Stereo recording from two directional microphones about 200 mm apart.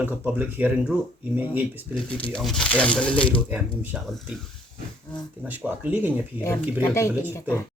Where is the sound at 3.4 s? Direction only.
10° right (ahead or behind).